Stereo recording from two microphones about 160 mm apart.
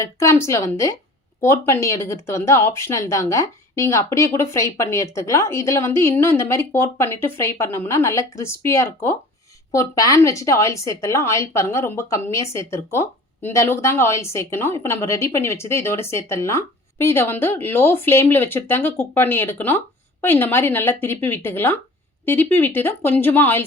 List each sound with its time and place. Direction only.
0.0 s speech: 20° left (ahead or behind)